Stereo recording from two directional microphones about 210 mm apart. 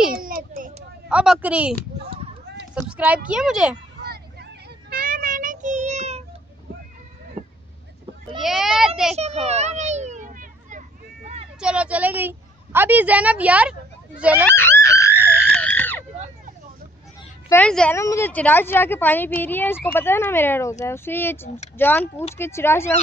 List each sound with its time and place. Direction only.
0.1 s a sound: 45° right (ahead or behind)
1.0 s a woman's voice: 5° right (ahead or behind)
4.1 s child singing: 45° right (ahead or behind); by 6.2 s 30° right (ahead or behind)
8.4 s a woman's voice: centre (ahead or behind)
9.1 s a child's voice: 30° right (ahead or behind)
9.5 s children playing: 30° right (ahead or behind)
11.6 s a woman's voice: 5° right (ahead or behind)
14.5 s a sound: 10° left (ahead or behind)
17.5 s a woman's voice: 5° left (ahead or behind)